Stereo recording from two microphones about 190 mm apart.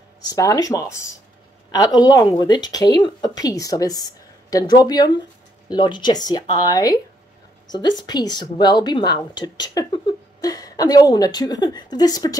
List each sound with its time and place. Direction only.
0.3 s a woman's voice: 20° left (ahead or behind)